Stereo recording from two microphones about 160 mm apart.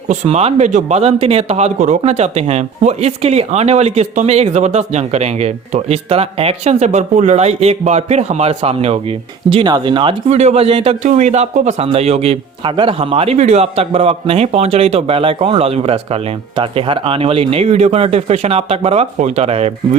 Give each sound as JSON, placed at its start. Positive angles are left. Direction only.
{"t": 0.1, "sound": "a man's voice", "side_deg": -40}